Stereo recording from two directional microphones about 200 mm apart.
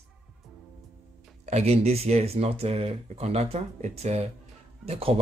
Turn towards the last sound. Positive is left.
turn(degrees=-30)  # may be behind; listen again after turning